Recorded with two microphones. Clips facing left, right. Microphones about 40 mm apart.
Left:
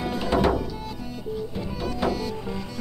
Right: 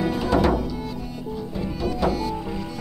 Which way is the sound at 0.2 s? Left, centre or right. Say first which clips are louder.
Right 1 dB; left.